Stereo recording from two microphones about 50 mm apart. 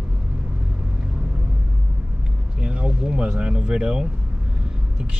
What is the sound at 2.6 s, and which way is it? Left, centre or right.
Speech, centre.